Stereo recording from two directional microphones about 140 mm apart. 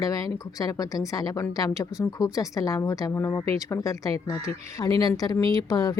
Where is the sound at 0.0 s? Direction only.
25° left (ahead or behind).